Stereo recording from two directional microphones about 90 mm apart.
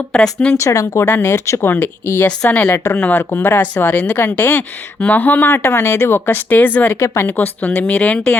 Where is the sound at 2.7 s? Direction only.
35° left (ahead or behind).